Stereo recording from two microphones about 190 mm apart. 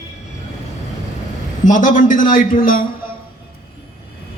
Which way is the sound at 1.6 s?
45° left (ahead or behind).